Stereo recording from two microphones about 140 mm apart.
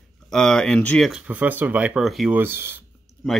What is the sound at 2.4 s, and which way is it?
Speech, 15° right (ahead or behind).